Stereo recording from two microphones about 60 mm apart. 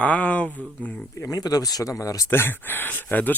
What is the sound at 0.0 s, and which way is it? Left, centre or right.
Speech, left.